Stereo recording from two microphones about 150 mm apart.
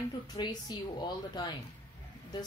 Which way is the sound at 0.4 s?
30° left (ahead or behind).